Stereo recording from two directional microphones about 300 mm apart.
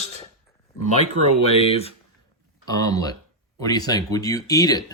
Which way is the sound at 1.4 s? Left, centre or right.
Centre.